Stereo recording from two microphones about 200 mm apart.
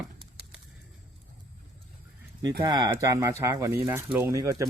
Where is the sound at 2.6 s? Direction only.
20° right (ahead or behind).